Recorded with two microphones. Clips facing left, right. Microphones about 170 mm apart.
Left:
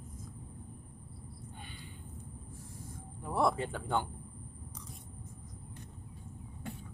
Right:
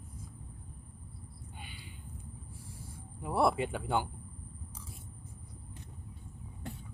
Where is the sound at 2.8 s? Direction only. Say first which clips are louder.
Right 2 dB; 10° right (ahead or behind).